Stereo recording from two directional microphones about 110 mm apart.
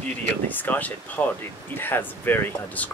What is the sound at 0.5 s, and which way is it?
Speech, 15° left (ahead or behind).